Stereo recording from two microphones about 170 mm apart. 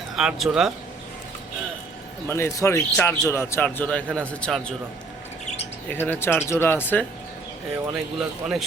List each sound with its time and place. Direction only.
0.2 s speech: centre (ahead or behind)
2.2 s a man's voice: 15° left (ahead or behind)
5.9 s a man's voice: 15° left (ahead or behind)
7.9 s speech: 5° right (ahead or behind)